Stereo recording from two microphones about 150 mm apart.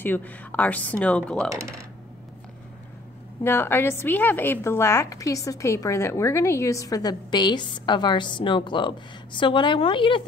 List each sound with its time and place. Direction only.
0.0 s speech: 10° left (ahead or behind)
3.4 s a woman's voice: 15° left (ahead or behind); by 10.2 s 35° left (ahead or behind)